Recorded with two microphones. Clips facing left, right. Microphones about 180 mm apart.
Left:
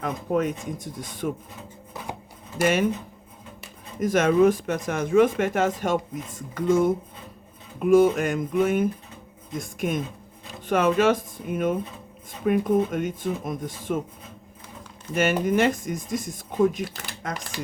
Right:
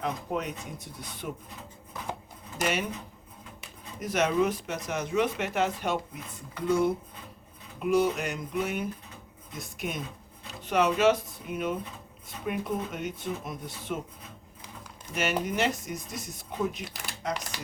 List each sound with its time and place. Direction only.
0.0 s speech: 45° left (ahead or behind)
2.6 s speech: 50° left (ahead or behind)
4.0 s speech: 50° left (ahead or behind)
15.1 s speech: 50° left (ahead or behind)